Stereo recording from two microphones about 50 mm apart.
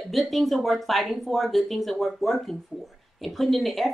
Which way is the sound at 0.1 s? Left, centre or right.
Centre.